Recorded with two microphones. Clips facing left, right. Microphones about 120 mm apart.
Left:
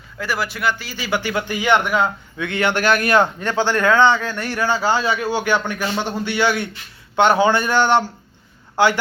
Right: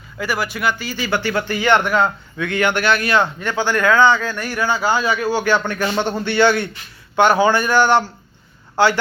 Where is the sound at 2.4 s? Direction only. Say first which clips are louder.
Right 1 dB; 25° left (ahead or behind).